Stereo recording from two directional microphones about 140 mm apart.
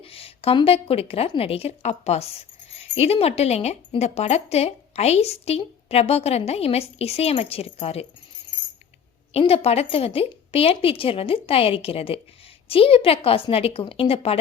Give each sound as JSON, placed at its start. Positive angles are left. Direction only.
{"t": 0.0, "sound": "a woman's voice", "side_deg": 45}
{"t": 9.3, "sound": "speech", "side_deg": 45}